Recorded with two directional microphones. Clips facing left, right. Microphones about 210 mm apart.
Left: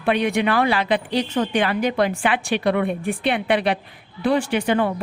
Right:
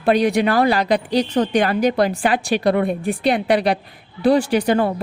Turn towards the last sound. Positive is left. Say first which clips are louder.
# right 3 dB
turn(degrees=-35)  # may be behind; listen again after turning